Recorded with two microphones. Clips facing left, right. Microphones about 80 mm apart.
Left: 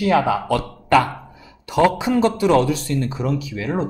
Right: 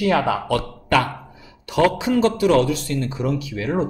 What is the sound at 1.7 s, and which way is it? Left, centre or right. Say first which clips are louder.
A man's voice: left 1 dB; left.